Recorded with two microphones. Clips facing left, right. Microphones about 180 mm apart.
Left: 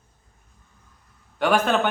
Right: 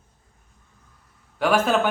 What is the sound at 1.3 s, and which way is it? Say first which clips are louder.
Speech: even; 5° right (ahead or behind).